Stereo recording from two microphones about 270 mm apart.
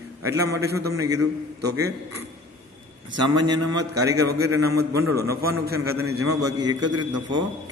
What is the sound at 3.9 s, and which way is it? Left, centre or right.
Speech, right.